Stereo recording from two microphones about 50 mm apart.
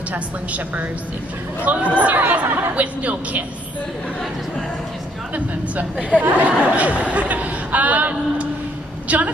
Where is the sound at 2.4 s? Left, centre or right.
Right.